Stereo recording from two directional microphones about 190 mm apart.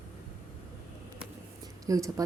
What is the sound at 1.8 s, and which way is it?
Speech, 20° right (ahead or behind).